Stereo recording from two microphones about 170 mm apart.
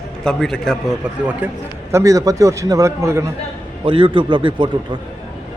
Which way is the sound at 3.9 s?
30° right (ahead or behind).